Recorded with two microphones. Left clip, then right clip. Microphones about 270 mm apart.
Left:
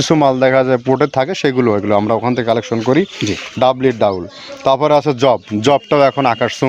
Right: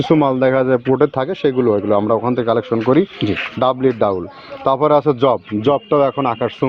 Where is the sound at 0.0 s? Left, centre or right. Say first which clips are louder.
Left 2 dB; left.